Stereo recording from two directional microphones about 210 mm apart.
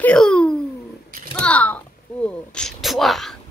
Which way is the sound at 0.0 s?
5° left (ahead or behind).